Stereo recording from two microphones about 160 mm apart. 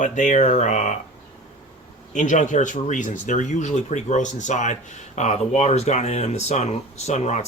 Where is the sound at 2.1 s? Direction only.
50° left (ahead or behind).